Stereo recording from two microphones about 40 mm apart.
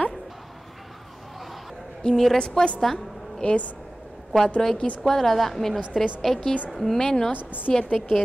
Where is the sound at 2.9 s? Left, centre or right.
Centre.